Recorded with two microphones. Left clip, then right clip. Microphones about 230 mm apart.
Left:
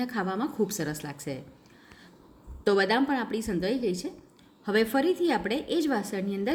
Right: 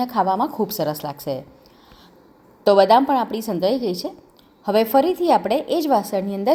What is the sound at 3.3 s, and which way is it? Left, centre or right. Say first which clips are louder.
Speech: right 5 dB; centre.